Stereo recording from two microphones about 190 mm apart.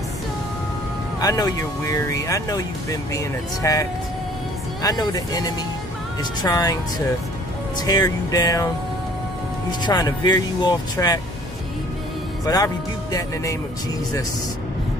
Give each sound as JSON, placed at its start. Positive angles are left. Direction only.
{"t": 1.2, "sound": "speech", "side_deg": 20}
{"t": 4.8, "sound": "speech", "side_deg": 20}
{"t": 6.4, "sound": "speech", "side_deg": 20}
{"t": 7.8, "sound": "speech", "side_deg": 20}
{"t": 9.7, "sound": "speech", "side_deg": 20}
{"t": 12.4, "sound": "speech", "side_deg": 20}